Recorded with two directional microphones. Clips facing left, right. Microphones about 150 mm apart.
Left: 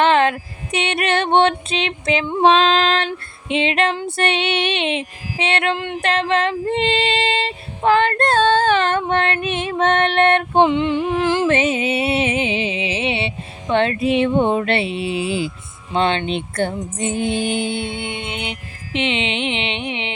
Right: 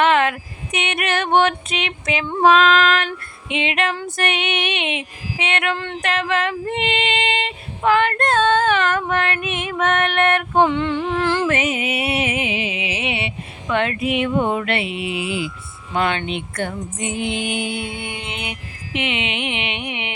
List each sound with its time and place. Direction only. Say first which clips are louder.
0.0 s music: left 2 dB; 30° left (ahead or behind)
3.5 s female singing: left 4 dB; 35° left (ahead or behind)
3.9 s music: left 3 dB; 30° left (ahead or behind)
5.7 s a sound: left 2 dB; 15° left (ahead or behind)
6.0 s music: left 3 dB; 30° left (ahead or behind)
11.4 s music: left 3 dB; 30° left (ahead or behind)